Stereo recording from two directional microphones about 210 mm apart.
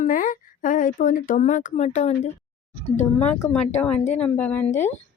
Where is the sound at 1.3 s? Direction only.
35° left (ahead or behind).